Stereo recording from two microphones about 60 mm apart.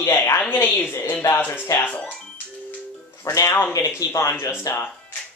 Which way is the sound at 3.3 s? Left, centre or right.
Left.